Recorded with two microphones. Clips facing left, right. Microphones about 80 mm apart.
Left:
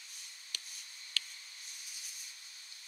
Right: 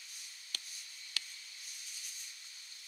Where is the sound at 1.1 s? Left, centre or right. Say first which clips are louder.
Left 4 dB; centre.